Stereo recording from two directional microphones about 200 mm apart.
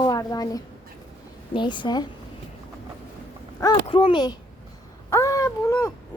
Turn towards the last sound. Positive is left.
turn(degrees=15)  # may be behind; listen again after turning